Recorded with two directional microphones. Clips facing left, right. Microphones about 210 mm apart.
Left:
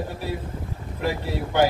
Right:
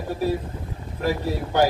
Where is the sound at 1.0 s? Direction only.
40° right (ahead or behind).